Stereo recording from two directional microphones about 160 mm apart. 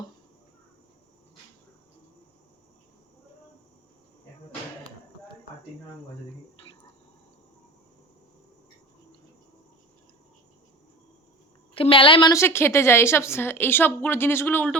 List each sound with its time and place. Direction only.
11.7 s a woman's voice: 35° left (ahead or behind)
12.3 s a woman's voice: 15° left (ahead or behind)